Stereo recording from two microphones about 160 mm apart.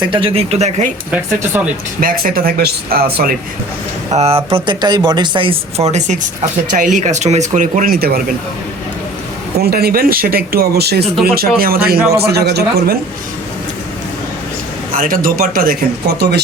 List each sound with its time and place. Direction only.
0.1 s speech: 35° right (ahead or behind)
1.5 s speech: 10° right (ahead or behind)
2.0 s speech: 60° right (ahead or behind)
4.1 s speech: 40° right (ahead or behind); by 8.2 s 70° right (ahead or behind)
9.6 s speech: 70° right (ahead or behind)
11.3 s speech: 65° right (ahead or behind)
12.1 s speech: 85° right
14.9 s speech: 60° right (ahead or behind); by 16.4 s 80° right